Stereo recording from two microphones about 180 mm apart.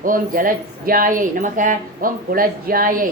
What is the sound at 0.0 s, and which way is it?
Speech, 50° right (ahead or behind).